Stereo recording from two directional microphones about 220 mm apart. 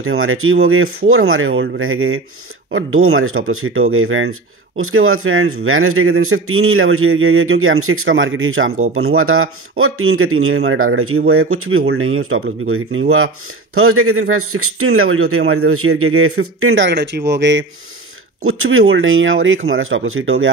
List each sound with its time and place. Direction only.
0.0 s speech: 70° right (ahead or behind)
18.4 s speech: 70° right (ahead or behind)